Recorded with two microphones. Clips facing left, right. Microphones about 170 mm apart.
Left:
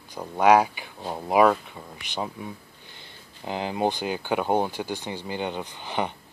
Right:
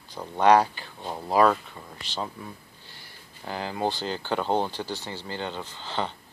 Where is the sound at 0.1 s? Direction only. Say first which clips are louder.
Left 1 dB; 10° left (ahead or behind).